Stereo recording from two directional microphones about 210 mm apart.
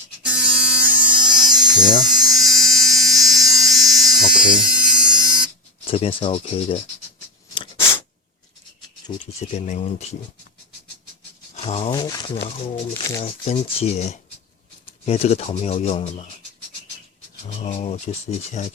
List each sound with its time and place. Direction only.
0.2 s electric toothbrush: 5° right (ahead or behind)
5.9 s speech: 25° left (ahead or behind)
9.1 s speech: 20° left (ahead or behind)
9.5 s speech: 35° left (ahead or behind)
11.5 s speech: 30° left (ahead or behind)
13.0 s speech: 15° left (ahead or behind)
13.2 s speech: 30° left (ahead or behind)
17.6 s speech: 30° left (ahead or behind)